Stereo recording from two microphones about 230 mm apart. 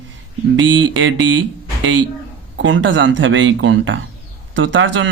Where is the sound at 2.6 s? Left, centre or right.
Right.